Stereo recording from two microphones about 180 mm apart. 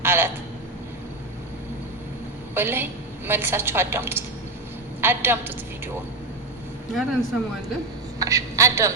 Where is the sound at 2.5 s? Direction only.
10° right (ahead or behind).